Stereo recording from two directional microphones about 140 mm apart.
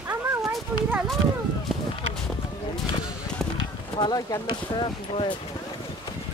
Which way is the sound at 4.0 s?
30° left (ahead or behind).